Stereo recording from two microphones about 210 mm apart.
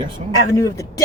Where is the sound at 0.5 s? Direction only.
15° left (ahead or behind).